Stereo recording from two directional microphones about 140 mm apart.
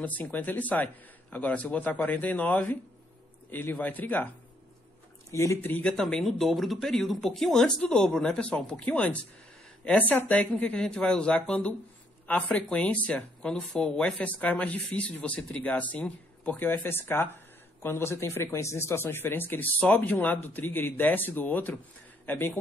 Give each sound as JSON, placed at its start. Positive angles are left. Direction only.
{"t": 0.0, "sound": "speech", "side_deg": 10}
{"t": 5.3, "sound": "a man's voice", "side_deg": 20}